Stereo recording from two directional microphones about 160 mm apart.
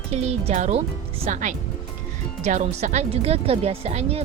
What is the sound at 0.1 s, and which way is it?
Speech, 40° right (ahead or behind).